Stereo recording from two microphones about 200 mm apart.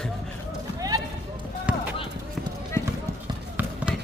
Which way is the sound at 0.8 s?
20° right (ahead or behind).